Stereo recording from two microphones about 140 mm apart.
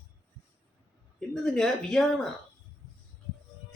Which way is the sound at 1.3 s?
5° left (ahead or behind).